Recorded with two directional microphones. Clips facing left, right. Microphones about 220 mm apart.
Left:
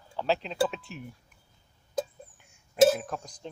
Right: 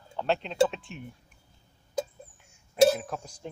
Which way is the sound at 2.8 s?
Centre (ahead or behind).